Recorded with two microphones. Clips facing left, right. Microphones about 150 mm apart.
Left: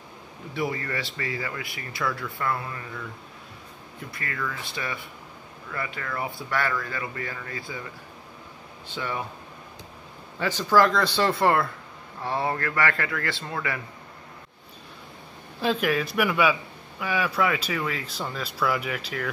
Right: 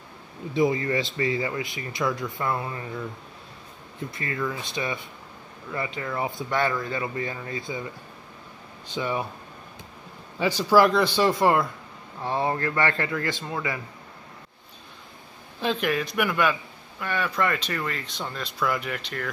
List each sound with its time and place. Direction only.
0.6 s speech: 20° right (ahead or behind)
4.1 s speech: 20° right (ahead or behind)
8.9 s speech: 15° right (ahead or behind)
10.4 s speech: 10° right (ahead or behind)
15.6 s speech: centre (ahead or behind)